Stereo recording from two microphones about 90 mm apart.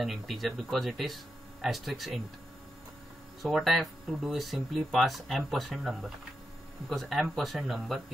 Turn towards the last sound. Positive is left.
turn(degrees=0)  # may be behind; listen again after turning